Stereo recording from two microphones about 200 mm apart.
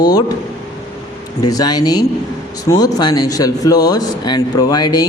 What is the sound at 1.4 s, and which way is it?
Speech, 20° left (ahead or behind).